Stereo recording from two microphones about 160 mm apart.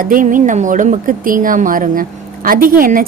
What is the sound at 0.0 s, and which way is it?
A woman's voice, 60° right (ahead or behind).